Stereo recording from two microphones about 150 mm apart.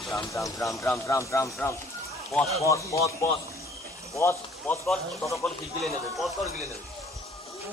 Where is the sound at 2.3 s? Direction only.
Centre (ahead or behind).